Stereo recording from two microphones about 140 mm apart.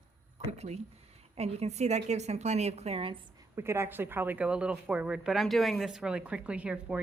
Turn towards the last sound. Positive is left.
turn(degrees=-10)  # may be behind; listen again after turning